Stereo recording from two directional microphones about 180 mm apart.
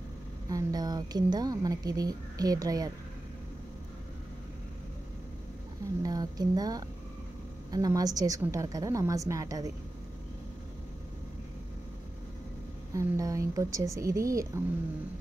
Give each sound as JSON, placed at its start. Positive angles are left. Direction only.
{"t": 0.5, "sound": "speech", "side_deg": -20}
{"t": 6.0, "sound": "speech", "side_deg": -20}
{"t": 12.9, "sound": "speech", "side_deg": -20}